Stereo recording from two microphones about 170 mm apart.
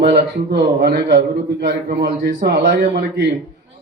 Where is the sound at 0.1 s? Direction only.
70° right (ahead or behind).